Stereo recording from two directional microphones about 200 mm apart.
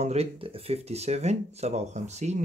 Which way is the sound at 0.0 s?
30° right (ahead or behind).